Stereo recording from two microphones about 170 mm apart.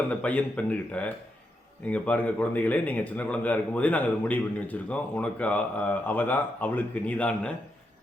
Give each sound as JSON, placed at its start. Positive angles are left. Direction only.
{"t": 0.1, "sound": "speech", "side_deg": 10}